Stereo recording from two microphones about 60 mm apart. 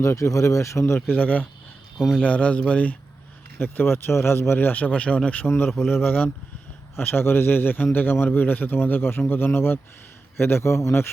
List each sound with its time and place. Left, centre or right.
0.0 s speech: left
1.0 s speech: left
3.6 s speech: left
5.5 s speech: left